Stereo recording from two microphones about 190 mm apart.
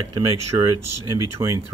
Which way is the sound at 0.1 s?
20° right (ahead or behind).